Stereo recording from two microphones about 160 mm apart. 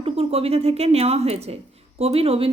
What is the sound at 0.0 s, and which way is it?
A woman's voice, 40° right (ahead or behind).